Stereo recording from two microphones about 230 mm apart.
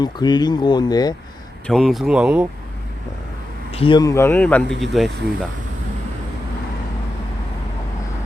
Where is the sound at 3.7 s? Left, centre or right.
Left; by 5.5 s centre.